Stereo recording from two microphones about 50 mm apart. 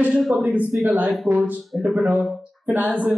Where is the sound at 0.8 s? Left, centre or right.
Right.